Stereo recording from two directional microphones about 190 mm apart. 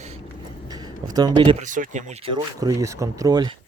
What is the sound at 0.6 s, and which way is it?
Speech, 20° right (ahead or behind).